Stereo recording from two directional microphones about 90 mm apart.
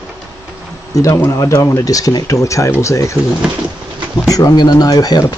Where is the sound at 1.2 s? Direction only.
35° left (ahead or behind).